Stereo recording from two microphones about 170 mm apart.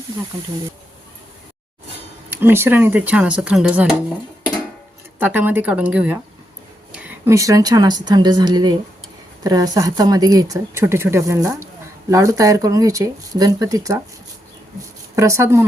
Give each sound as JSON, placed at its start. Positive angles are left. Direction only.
{"t": 2.3, "sound": "speech", "side_deg": -15}
{"t": 5.2, "sound": "speech", "side_deg": -10}
{"t": 6.9, "sound": "a sound", "side_deg": -5}
{"t": 7.3, "sound": "speech", "side_deg": -20}
{"t": 15.1, "sound": "speech", "side_deg": -20}